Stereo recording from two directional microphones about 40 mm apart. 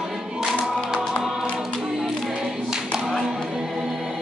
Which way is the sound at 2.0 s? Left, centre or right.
Centre.